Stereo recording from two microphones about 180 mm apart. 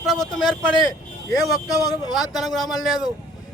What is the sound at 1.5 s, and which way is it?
Speech, 20° left (ahead or behind).